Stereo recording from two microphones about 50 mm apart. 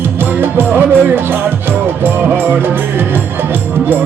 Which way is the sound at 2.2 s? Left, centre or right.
Right.